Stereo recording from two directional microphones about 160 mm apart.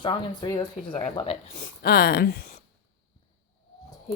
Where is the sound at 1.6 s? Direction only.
70° left (ahead or behind).